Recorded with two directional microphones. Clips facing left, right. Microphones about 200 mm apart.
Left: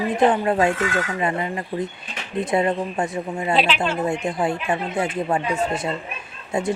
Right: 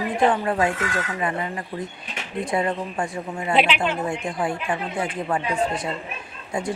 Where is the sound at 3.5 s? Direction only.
20° right (ahead or behind).